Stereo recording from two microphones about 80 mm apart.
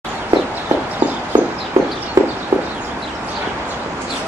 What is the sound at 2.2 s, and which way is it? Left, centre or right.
Horse, right.